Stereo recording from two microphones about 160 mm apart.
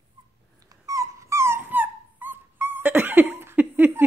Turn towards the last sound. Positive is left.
turn(degrees=-10)  # may be behind; listen again after turning